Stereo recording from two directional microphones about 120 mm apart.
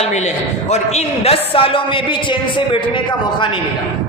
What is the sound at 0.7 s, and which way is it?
Speech, 65° left (ahead or behind).